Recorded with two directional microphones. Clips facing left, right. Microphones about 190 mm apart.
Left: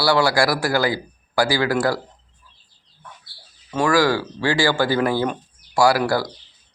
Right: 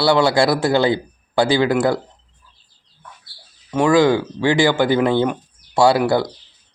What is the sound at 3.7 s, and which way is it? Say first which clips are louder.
Speech: right 4 dB; 20° right (ahead or behind).